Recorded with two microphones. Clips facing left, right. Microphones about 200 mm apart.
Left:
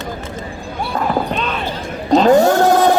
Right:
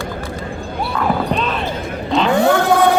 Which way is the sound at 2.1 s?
40° left (ahead or behind).